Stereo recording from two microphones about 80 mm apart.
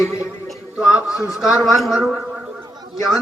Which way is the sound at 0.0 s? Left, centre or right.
Centre.